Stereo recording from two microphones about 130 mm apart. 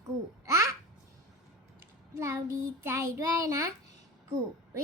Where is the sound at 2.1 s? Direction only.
25° right (ahead or behind).